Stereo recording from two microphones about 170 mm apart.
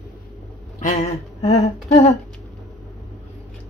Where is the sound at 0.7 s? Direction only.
45° left (ahead or behind).